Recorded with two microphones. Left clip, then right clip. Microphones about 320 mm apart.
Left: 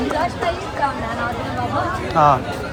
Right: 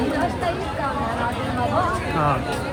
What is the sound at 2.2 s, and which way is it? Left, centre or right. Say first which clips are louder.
Speech: left 9 dB; centre.